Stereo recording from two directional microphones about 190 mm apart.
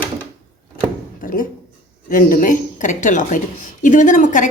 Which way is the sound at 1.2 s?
45° left (ahead or behind).